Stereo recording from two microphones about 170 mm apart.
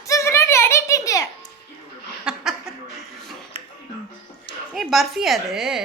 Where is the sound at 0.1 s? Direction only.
15° left (ahead or behind).